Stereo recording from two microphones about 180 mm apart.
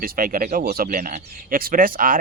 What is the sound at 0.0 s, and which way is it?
Speech, 55° right (ahead or behind).